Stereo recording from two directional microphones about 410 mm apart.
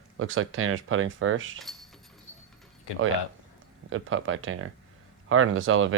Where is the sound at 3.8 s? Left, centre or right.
Right.